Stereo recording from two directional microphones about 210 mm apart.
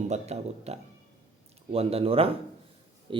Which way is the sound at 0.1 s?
30° right (ahead or behind).